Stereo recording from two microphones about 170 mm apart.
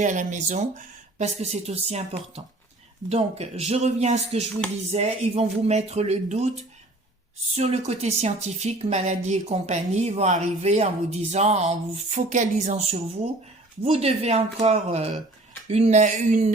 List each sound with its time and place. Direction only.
0.0 s speech: 45° right (ahead or behind)
13.8 s speech: 35° right (ahead or behind)